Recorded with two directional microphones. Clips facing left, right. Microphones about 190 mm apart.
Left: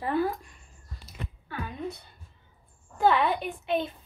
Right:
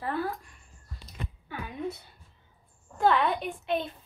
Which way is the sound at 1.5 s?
5° right (ahead or behind).